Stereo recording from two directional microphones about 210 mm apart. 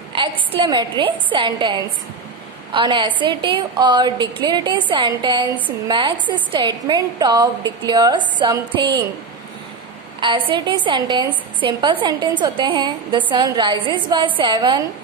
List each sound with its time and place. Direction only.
0.1 s a woman's voice: 25° right (ahead or behind)
10.2 s a woman's voice: 25° right (ahead or behind)